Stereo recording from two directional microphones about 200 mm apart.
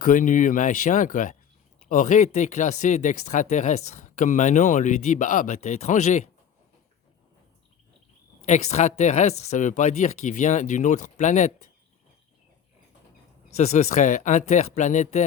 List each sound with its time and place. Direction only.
0.0 s speech: 40° left (ahead or behind)
8.4 s speech: 35° left (ahead or behind)
13.6 s speech: 35° left (ahead or behind)